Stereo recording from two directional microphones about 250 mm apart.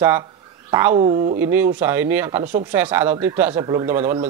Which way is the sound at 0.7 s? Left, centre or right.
Centre.